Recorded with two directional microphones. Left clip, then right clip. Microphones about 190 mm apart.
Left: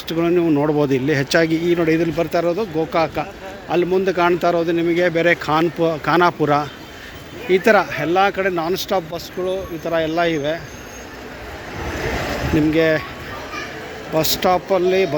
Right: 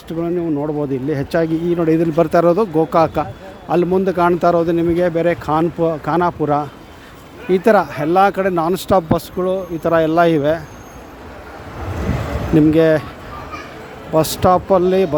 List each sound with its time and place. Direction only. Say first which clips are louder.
0.1 s speech: left 3 dB; 10° right (ahead or behind)
0.9 s speech: left 2 dB; 15° right (ahead or behind)
2.1 s speech: right 6 dB; 40° right (ahead or behind)
9.1 s speech: right 4 dB; 55° right (ahead or behind)
9.9 s speech: right 5 dB; 35° right (ahead or behind)
12.5 s speech: right 5 dB; 35° right (ahead or behind)
14.1 s speech: right 3 dB; 35° right (ahead or behind)